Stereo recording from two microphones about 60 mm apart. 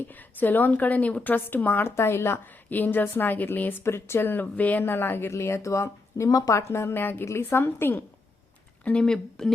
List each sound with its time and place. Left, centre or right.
0.1 s a woman's voice: left
2.0 s a woman's voice: left
2.5 s speech: left
5.3 s speech: left
6.7 s speech: left
8.8 s speech: centre